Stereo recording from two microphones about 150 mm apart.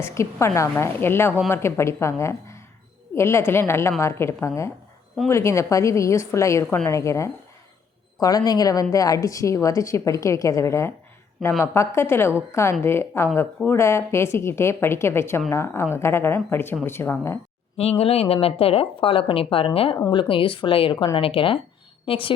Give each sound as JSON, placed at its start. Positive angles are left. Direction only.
{"t": 0.0, "sound": "a woman's voice", "side_deg": 20}
{"t": 17.7, "sound": "a woman's voice", "side_deg": 40}